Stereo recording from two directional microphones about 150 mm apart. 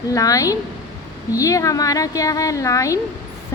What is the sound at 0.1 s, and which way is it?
A woman's voice, 20° left (ahead or behind).